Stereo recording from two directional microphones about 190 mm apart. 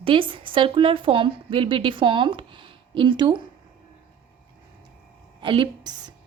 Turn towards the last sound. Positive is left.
turn(degrees=-25)  # may be behind; listen again after turning